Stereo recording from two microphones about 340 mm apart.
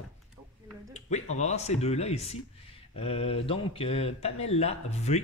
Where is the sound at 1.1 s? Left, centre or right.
Centre.